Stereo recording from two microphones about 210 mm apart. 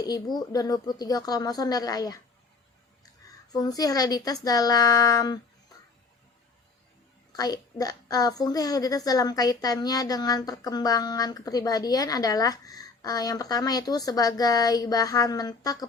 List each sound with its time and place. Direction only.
0.3 s a woman's voice: 20° left (ahead or behind)
3.5 s a woman's voice: 20° left (ahead or behind)
7.3 s a woman's voice: 20° left (ahead or behind)